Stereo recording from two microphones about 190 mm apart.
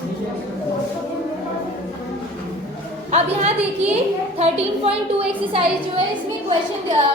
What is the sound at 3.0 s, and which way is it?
A woman's voice, 35° right (ahead or behind).